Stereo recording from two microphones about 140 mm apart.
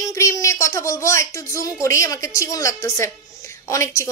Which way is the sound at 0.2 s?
20° left (ahead or behind).